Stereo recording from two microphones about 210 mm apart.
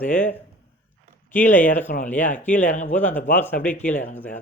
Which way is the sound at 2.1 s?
35° left (ahead or behind).